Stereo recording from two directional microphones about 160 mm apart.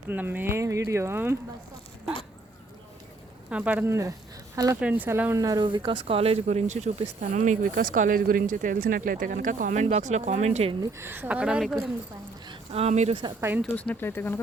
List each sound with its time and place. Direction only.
0.1 s speech: 10° right (ahead or behind)
3.5 s speech: 10° right (ahead or behind)
4.8 s speech: 10° right (ahead or behind); by 10.8 s 40° right (ahead or behind)
10.9 s speech: 15° right (ahead or behind)
12.5 s speech: 40° right (ahead or behind)
13.6 s speech: 10° left (ahead or behind)